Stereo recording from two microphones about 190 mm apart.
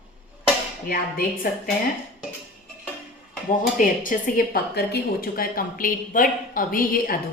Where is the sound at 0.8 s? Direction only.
50° left (ahead or behind).